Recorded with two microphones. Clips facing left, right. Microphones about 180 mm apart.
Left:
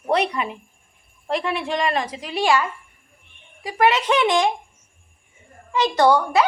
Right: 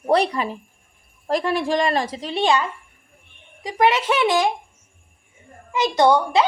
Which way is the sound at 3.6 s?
15° right (ahead or behind).